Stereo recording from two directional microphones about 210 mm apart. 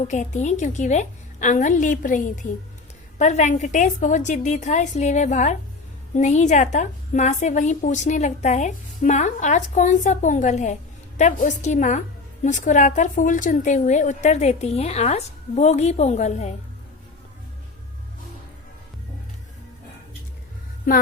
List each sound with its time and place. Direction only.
0.0 s a woman's voice: 35° left (ahead or behind)